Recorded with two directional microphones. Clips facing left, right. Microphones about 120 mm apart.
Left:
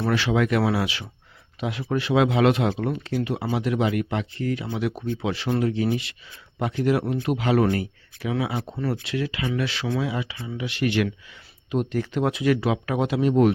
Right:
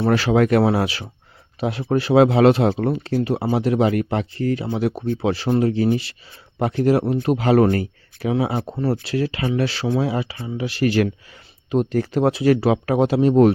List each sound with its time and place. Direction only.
0.0 s speech: 40° right (ahead or behind)